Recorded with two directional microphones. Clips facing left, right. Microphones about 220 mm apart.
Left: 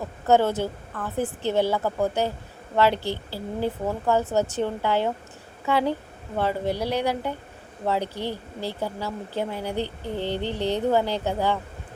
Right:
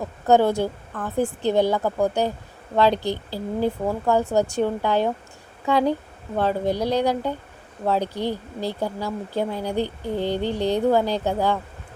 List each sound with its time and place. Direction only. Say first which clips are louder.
0.3 s speech: right 2 dB; 15° right (ahead or behind)